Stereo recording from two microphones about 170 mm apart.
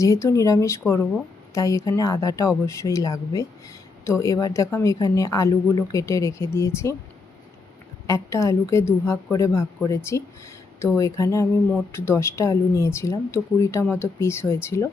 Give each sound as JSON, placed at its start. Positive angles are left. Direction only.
{"t": 0.0, "sound": "a woman's voice", "side_deg": 15}
{"t": 8.0, "sound": "speech", "side_deg": 20}